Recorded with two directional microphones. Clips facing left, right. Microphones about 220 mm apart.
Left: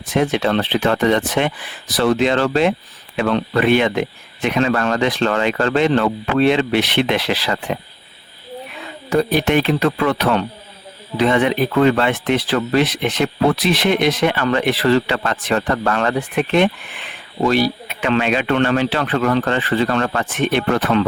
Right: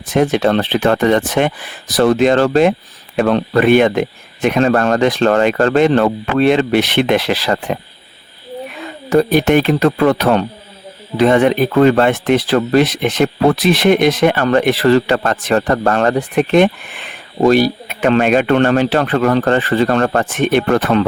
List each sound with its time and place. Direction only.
0.1 s speech: 45° right (ahead or behind)
9.0 s speech: 45° right (ahead or behind)